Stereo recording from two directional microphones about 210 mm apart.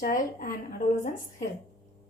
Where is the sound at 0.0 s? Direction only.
40° left (ahead or behind).